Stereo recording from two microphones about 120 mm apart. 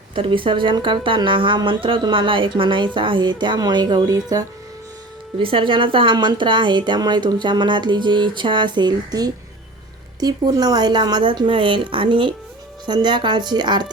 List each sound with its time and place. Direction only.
0.1 s speech: 45° right (ahead or behind)
5.4 s a woman's voice: 45° right (ahead or behind)